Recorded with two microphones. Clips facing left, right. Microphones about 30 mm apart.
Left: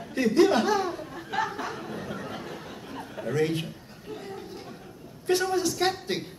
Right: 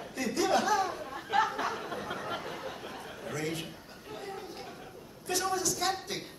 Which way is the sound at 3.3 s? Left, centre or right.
Left.